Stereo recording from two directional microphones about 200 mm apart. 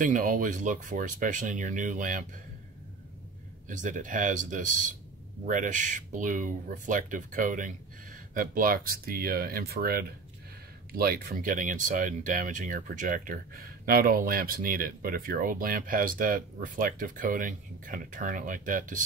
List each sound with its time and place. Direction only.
0.0 s speech: 40° right (ahead or behind)
3.6 s speech: 40° right (ahead or behind)